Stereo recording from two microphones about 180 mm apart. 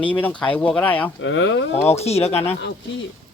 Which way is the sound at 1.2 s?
90° left.